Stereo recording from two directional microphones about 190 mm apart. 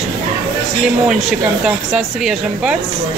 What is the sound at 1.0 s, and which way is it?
Speech, centre (ahead or behind).